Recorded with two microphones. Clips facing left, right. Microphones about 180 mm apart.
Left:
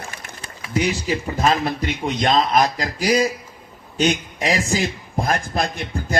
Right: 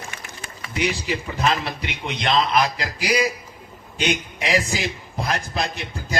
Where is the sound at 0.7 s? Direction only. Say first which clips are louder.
Left 3 dB; 45° left (ahead or behind).